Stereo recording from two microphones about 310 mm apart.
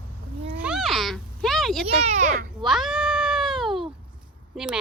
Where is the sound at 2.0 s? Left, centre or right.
Right.